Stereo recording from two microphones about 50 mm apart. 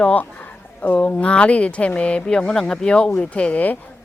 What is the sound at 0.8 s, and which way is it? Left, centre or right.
Speech, left.